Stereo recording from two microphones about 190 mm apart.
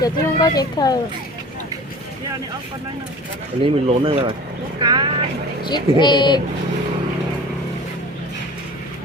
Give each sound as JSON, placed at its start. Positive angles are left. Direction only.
{"t": 0.0, "sound": "speech", "side_deg": 20}
{"t": 3.6, "sound": "speech", "side_deg": -30}
{"t": 5.6, "sound": "speech", "side_deg": 25}